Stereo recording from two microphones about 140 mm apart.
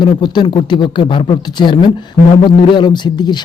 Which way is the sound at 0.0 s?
35° left (ahead or behind).